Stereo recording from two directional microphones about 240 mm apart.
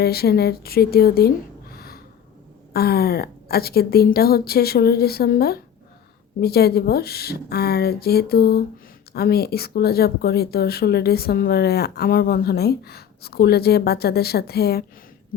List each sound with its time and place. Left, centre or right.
0.0 s a woman's voice: left